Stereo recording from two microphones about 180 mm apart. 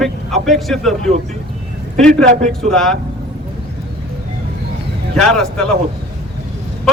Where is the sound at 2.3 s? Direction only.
45° right (ahead or behind).